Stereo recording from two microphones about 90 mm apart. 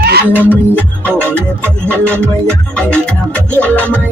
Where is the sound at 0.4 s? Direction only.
20° left (ahead or behind).